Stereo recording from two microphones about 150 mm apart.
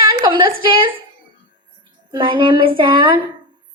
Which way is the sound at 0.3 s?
35° right (ahead or behind).